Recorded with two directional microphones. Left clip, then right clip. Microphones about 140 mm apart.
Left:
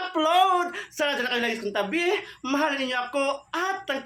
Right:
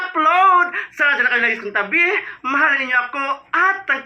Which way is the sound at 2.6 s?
40° left (ahead or behind).